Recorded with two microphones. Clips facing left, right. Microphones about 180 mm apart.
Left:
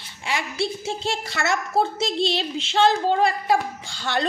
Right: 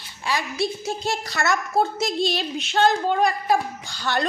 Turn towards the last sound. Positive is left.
turn(degrees=25)  # may be behind; listen again after turning